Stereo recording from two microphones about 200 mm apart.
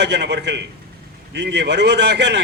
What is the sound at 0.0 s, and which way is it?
A man's voice, 55° right (ahead or behind).